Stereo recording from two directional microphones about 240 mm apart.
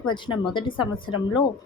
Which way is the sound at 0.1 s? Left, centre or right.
Centre.